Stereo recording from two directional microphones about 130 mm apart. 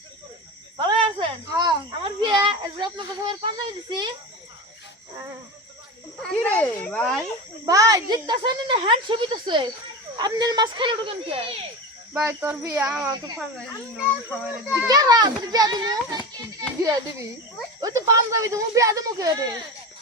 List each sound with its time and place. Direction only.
0.9 s a sound: 30° right (ahead or behind)
2.0 s speech: 40° right (ahead or behind)
6.2 s a child's voice: 10° left (ahead or behind)
7.6 s speech: 25° right (ahead or behind); by 11.5 s 45° right (ahead or behind)
12.1 s speech: 15° right (ahead or behind)
14.8 s speech: 30° right (ahead or behind)